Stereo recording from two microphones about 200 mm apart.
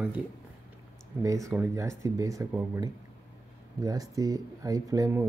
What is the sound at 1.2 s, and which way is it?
Speech, 15° right (ahead or behind).